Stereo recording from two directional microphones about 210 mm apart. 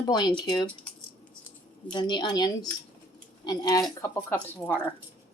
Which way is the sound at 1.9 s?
20° left (ahead or behind).